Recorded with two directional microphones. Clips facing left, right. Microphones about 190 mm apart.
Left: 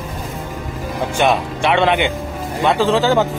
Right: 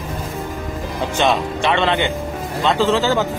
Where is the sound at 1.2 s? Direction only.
15° left (ahead or behind).